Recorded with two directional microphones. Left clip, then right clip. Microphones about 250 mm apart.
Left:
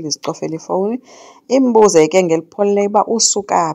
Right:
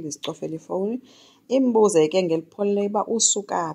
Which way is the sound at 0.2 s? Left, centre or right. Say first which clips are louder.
Left 8 dB; left.